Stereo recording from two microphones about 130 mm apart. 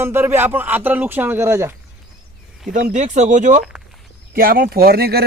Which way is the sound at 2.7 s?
70° right (ahead or behind).